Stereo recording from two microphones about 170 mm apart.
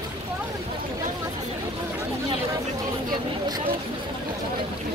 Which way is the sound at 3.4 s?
25° right (ahead or behind).